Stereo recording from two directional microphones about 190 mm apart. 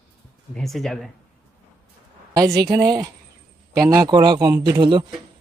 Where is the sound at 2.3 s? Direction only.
20° right (ahead or behind).